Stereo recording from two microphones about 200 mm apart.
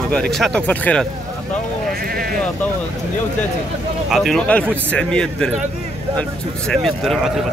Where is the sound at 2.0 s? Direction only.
50° right (ahead or behind).